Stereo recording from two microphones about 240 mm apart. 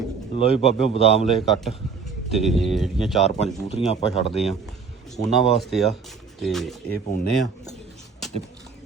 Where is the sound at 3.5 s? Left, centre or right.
Left.